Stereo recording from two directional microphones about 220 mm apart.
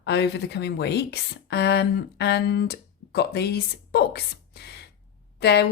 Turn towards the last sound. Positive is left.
turn(degrees=50)  # may be behind; listen again after turning